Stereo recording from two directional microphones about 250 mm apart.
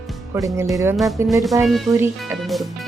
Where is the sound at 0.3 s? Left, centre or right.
Centre.